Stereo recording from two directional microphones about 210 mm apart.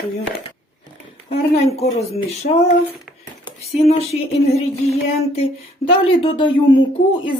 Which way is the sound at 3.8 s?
30° left (ahead or behind).